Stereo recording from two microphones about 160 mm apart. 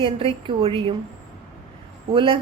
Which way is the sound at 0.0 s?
35° right (ahead or behind).